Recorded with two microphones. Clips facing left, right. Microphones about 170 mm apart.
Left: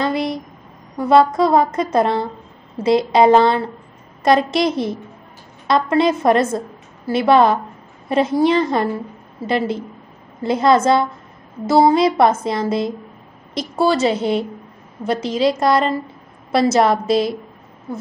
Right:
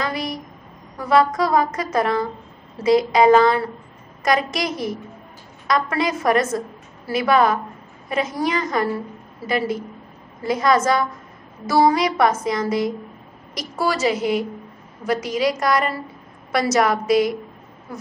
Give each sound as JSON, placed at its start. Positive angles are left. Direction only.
{"t": 0.0, "sound": "a sound", "side_deg": 25}
{"t": 0.9, "sound": "a woman's voice", "side_deg": 25}
{"t": 10.4, "sound": "a woman's voice", "side_deg": 25}